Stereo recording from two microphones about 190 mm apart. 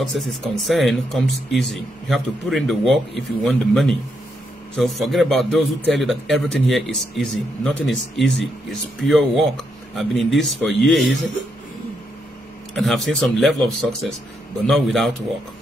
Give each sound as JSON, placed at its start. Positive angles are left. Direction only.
{"t": 0.0, "sound": "speech", "side_deg": 0}
{"t": 12.7, "sound": "speech", "side_deg": 0}
{"t": 14.7, "sound": "speech", "side_deg": 0}